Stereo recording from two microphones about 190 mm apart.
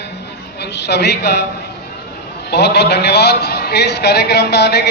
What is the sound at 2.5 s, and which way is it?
A man's voice, 60° left (ahead or behind).